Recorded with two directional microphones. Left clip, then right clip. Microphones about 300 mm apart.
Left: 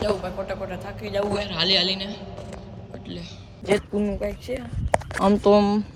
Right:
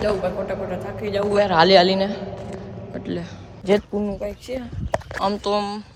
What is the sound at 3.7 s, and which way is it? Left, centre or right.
A man's voice, centre.